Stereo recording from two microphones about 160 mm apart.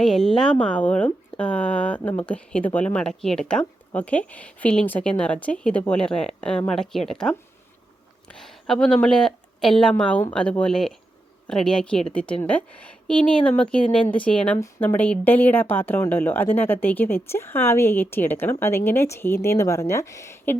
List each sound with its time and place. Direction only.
0.0 s a woman's voice: centre (ahead or behind)